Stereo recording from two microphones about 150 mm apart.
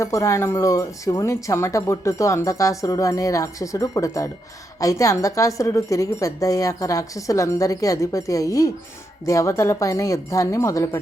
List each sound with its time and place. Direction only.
0.0 s speech: 20° left (ahead or behind)